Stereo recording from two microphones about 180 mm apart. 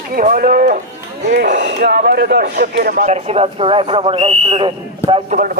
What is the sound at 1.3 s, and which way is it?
Speech, 70° right (ahead or behind).